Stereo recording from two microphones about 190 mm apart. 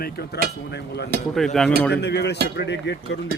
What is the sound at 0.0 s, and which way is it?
A man's voice, 55° left (ahead or behind).